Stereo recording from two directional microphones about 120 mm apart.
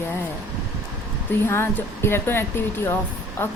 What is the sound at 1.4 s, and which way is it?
Speech, 20° left (ahead or behind).